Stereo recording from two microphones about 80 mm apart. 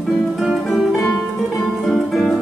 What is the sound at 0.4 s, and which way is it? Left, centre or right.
Music, centre.